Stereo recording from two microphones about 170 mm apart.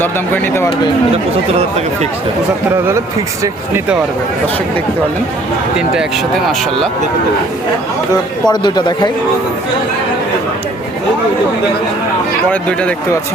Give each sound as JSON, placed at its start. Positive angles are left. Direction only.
{"t": 1.1, "sound": "speech", "side_deg": -35}
{"t": 5.7, "sound": "speech", "side_deg": -5}
{"t": 8.1, "sound": "speech", "side_deg": 25}
{"t": 12.5, "sound": "speech", "side_deg": 5}